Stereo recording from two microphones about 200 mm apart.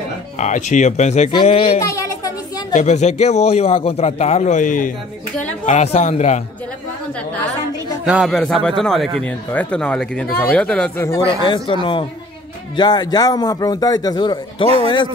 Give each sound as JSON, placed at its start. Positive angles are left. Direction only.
{"t": 0.4, "sound": "a man's voice", "side_deg": 35}
{"t": 1.8, "sound": "a sound", "side_deg": 15}
{"t": 2.7, "sound": "a man's voice", "side_deg": 35}
{"t": 8.0, "sound": "speech", "side_deg": -5}
{"t": 11.2, "sound": "speech", "side_deg": 25}